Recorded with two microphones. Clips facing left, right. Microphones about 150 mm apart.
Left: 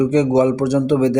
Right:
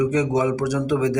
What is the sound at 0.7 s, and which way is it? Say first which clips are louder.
Speech: left 6 dB; 30° left (ahead or behind).